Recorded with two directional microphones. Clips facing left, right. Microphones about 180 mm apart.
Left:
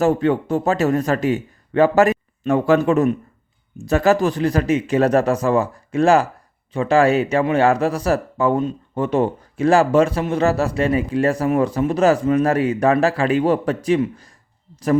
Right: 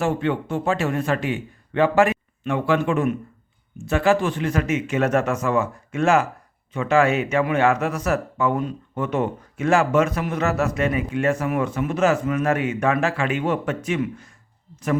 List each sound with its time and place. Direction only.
0.0 s speech: 40° left (ahead or behind)